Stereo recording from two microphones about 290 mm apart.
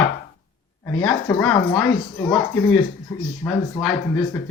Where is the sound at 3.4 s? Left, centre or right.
Centre.